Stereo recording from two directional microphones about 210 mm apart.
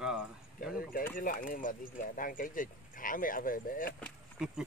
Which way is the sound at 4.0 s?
Centre (ahead or behind).